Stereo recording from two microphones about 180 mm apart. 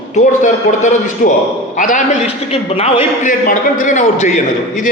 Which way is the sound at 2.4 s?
35° left (ahead or behind).